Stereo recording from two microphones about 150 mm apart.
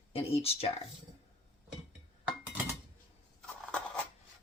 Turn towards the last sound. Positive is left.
turn(degrees=5)  # may be behind; listen again after turning